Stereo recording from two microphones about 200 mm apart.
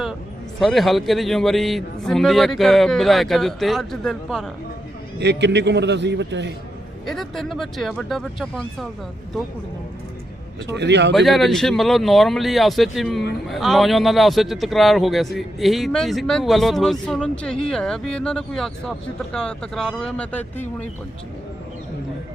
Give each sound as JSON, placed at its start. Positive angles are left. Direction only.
{"t": 0.6, "sound": "a man's voice", "side_deg": 0}
{"t": 5.2, "sound": "a man's voice", "side_deg": -60}
{"t": 7.0, "sound": "a man's voice", "side_deg": 0}
{"t": 10.7, "sound": "a man's voice", "side_deg": -60}
{"t": 11.1, "sound": "a man's voice", "side_deg": 0}